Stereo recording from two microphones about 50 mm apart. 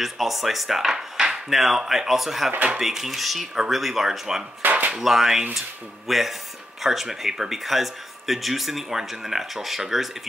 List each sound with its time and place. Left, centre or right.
0.0 s speech: centre
4.6 s a sound: right
4.9 s speech: centre